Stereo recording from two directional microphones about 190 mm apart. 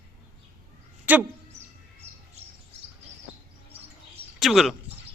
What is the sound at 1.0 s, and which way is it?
Speech, 10° right (ahead or behind).